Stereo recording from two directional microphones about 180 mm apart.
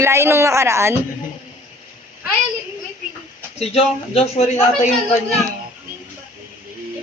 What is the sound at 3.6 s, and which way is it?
Speech, 35° left (ahead or behind).